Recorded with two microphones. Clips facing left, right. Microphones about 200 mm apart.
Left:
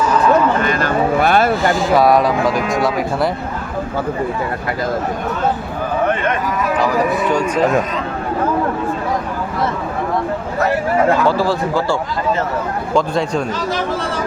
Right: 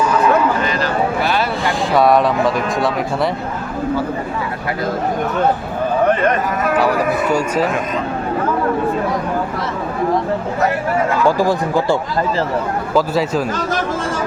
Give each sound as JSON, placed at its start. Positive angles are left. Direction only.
{"t": 0.6, "sound": "a sound", "side_deg": 50}
{"t": 1.6, "sound": "speech", "side_deg": 0}
{"t": 7.3, "sound": "speech", "side_deg": -10}
{"t": 11.3, "sound": "speech", "side_deg": -15}
{"t": 12.9, "sound": "speech", "side_deg": -5}